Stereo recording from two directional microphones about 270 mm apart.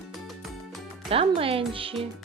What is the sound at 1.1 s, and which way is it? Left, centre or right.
Music, right.